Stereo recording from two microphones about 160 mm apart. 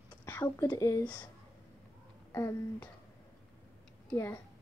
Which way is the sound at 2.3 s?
20° left (ahead or behind).